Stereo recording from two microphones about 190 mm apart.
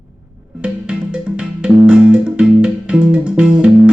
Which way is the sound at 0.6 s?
5° right (ahead or behind).